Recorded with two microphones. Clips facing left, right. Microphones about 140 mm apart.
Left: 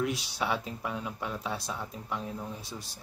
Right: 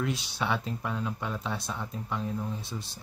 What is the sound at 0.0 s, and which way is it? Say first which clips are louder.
Speech: even; 5° left (ahead or behind).